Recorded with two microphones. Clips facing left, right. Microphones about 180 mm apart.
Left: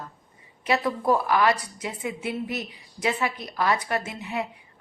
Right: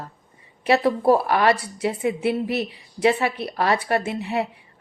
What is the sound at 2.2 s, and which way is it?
A woman's voice, 65° right (ahead or behind).